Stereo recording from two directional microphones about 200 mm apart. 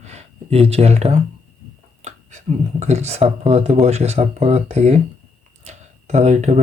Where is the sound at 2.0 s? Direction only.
35° right (ahead or behind).